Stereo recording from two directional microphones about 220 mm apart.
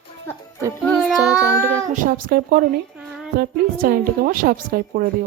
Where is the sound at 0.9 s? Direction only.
5° left (ahead or behind).